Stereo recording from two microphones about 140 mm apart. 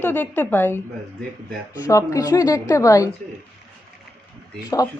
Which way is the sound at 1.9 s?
20° left (ahead or behind).